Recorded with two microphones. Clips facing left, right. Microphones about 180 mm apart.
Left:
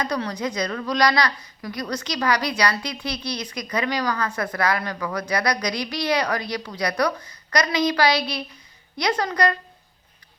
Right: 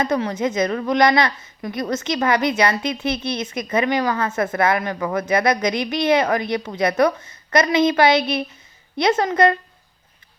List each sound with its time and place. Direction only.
0.0 s a woman's voice: 20° right (ahead or behind)